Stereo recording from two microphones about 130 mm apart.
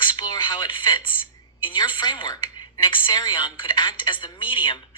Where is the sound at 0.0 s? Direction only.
35° left (ahead or behind).